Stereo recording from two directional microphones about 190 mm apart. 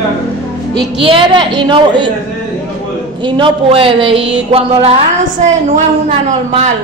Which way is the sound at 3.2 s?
25° right (ahead or behind).